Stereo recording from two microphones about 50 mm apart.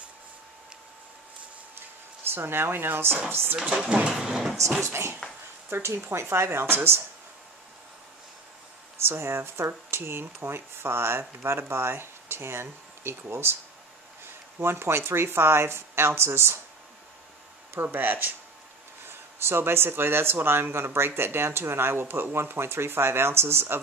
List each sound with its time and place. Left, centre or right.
2.3 s speech: right
4.1 s speech: centre
4.8 s speech: right
5.9 s speech: right
9.0 s speech: right
14.6 s speech: right
17.9 s speech: right
19.0 s speech: right